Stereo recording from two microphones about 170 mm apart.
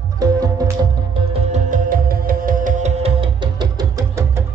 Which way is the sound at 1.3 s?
45° right (ahead or behind).